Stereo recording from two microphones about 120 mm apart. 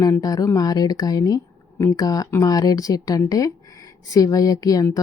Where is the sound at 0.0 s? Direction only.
30° left (ahead or behind).